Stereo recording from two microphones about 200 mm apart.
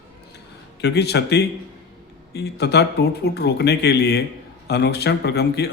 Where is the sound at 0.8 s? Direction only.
55° left (ahead or behind).